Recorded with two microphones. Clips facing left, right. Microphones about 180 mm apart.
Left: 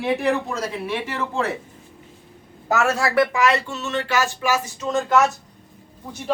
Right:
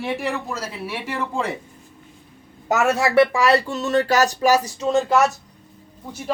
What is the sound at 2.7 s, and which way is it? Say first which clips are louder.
Speech: right 2 dB; 20° right (ahead or behind).